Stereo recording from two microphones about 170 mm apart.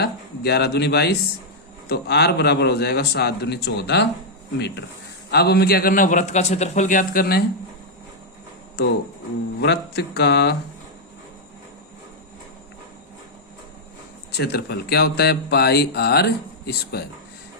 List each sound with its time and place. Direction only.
0.0 s speech: 75° left (ahead or behind); by 4.9 s 90° left
5.3 s a man's voice: 70° left (ahead or behind)
9.6 s speech: 75° left (ahead or behind)
14.3 s speech: 75° left (ahead or behind)